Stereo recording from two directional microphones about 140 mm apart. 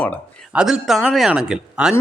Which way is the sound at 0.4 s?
5° right (ahead or behind).